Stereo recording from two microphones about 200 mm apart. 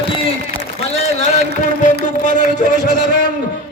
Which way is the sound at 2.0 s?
40° left (ahead or behind).